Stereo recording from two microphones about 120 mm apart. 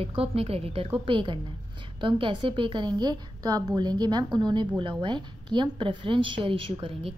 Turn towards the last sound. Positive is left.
turn(degrees=-45)  # may be behind; listen again after turning